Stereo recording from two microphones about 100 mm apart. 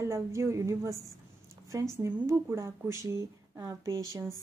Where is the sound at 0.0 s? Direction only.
30° right (ahead or behind).